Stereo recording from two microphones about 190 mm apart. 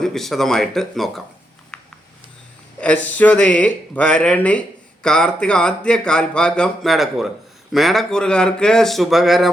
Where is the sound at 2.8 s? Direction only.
10° left (ahead or behind).